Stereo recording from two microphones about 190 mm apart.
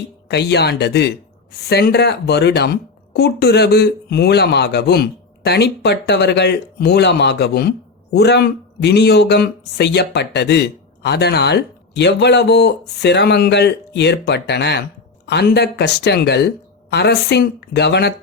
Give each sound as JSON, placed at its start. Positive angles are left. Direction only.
{"t": 0.3, "sound": "speech", "side_deg": 60}